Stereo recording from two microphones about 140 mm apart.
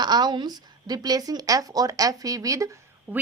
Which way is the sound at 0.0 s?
30° right (ahead or behind).